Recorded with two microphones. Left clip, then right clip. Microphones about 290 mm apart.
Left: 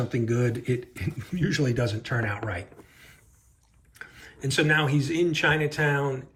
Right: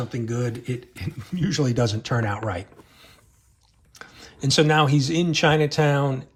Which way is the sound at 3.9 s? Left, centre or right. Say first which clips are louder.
Right 1 dB; centre.